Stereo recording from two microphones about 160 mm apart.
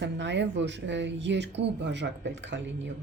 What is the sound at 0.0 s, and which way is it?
Speech, 90° right.